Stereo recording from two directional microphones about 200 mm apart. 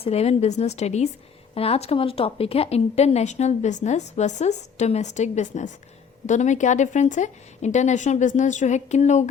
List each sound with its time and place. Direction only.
0.0 s speech: 30° left (ahead or behind)